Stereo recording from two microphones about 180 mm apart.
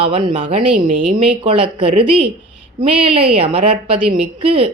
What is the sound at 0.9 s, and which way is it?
Speech, 45° right (ahead or behind).